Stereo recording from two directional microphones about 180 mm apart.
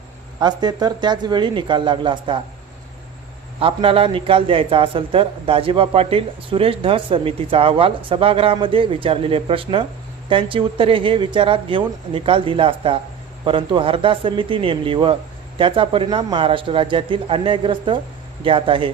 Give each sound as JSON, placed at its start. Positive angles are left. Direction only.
{"t": 0.3, "sound": "a man's voice", "side_deg": -20}
{"t": 3.6, "sound": "a man's voice", "side_deg": -30}